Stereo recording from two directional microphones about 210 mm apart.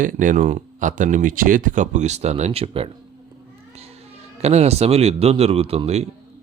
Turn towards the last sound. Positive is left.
turn(degrees=-30)  # may be behind; listen again after turning